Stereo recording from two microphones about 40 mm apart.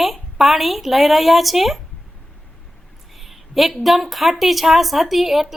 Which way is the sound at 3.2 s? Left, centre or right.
Centre.